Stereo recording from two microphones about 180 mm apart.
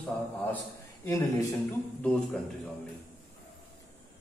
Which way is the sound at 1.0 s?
20° left (ahead or behind).